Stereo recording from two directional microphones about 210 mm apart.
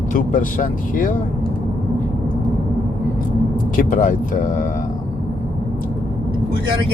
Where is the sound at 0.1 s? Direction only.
40° left (ahead or behind).